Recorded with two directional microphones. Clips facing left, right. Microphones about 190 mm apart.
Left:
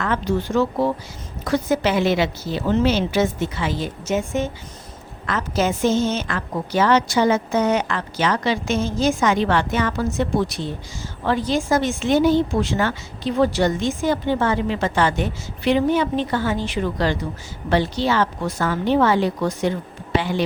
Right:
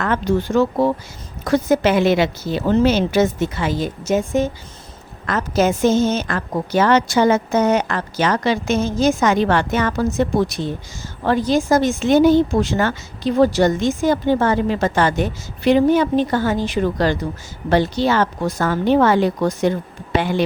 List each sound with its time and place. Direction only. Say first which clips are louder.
0.0 s a woman's voice: right 3 dB; 50° right (ahead or behind)